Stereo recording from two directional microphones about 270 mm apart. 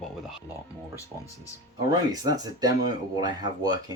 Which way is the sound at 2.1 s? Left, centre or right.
Centre.